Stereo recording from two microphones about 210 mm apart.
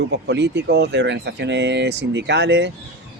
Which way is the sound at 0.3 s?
55° right (ahead or behind).